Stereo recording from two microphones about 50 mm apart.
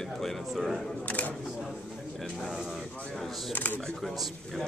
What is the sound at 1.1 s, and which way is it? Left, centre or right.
Single-lens reflex camera, left.